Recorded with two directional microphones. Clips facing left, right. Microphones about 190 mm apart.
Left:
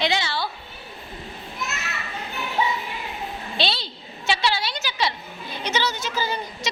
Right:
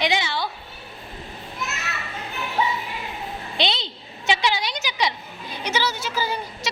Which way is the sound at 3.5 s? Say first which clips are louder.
Right 1 dB; 20° right (ahead or behind).